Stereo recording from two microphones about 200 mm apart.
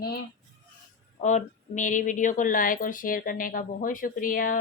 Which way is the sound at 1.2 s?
35° left (ahead or behind).